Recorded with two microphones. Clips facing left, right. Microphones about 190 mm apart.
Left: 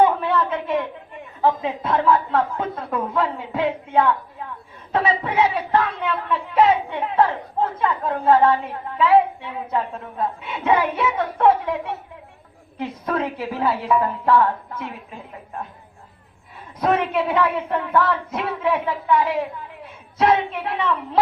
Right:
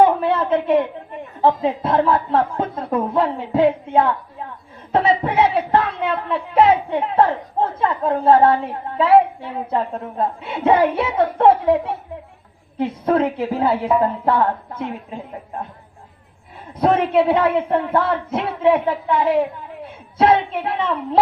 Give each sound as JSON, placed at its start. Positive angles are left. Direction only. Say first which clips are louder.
{"t": 0.0, "sound": "a sound", "louder": "right 3 dB", "side_deg": -30}
{"t": 1.4, "sound": "a woman's voice", "louder": "right 3 dB", "side_deg": -30}
{"t": 16.8, "sound": "a woman's voice", "louder": "right 5 dB", "side_deg": -25}